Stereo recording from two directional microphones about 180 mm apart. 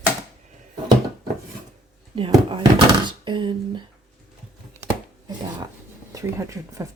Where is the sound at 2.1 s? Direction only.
30° right (ahead or behind).